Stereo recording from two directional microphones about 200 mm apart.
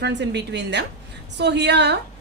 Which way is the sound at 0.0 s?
60° right (ahead or behind).